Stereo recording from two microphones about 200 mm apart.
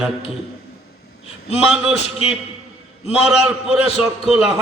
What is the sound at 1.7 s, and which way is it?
Speech, 5° right (ahead or behind).